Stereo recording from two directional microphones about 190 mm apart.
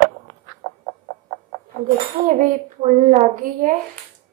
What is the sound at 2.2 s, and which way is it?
A woman's voice, 40° right (ahead or behind).